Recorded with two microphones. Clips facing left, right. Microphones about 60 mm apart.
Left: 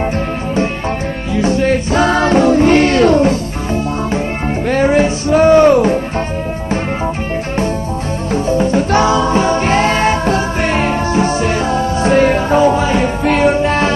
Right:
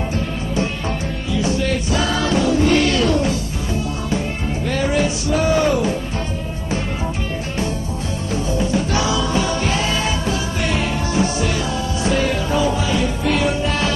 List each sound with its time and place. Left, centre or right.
1.3 s music: left
8.3 s music: left